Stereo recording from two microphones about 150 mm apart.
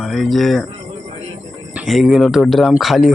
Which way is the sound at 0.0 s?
Centre (ahead or behind).